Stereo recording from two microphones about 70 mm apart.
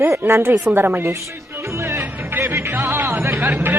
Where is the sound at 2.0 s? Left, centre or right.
Right.